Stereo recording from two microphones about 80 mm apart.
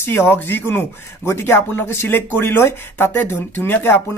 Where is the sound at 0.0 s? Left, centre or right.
Left.